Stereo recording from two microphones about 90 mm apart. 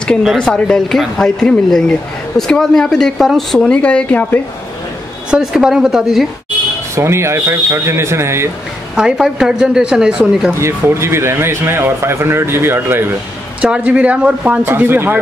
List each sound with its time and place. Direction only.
0.2 s speech: centre (ahead or behind)
0.5 s speech: 10° left (ahead or behind)
5.3 s speech: 5° right (ahead or behind)
7.0 s speech: 30° right (ahead or behind)
8.9 s a man's voice: 5° right (ahead or behind)
10.5 s speech: 30° right (ahead or behind)
13.6 s a man's voice: 15° right (ahead or behind)